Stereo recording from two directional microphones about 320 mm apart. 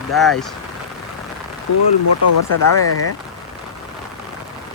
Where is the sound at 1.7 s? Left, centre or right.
Left.